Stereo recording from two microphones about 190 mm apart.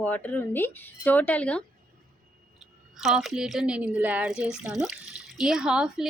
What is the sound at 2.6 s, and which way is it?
A woman's voice, centre (ahead or behind).